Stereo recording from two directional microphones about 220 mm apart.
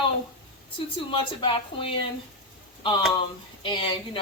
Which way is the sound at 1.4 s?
25° left (ahead or behind).